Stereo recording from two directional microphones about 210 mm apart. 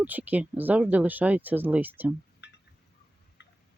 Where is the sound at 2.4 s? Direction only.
55° left (ahead or behind).